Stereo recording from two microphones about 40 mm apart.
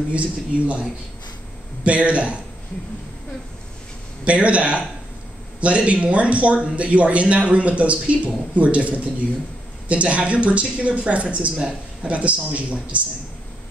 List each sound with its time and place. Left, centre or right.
0.1 s speech: right
1.9 s speech: right
4.2 s speech: right